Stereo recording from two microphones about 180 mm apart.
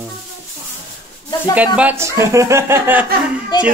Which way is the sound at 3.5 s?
25° left (ahead or behind).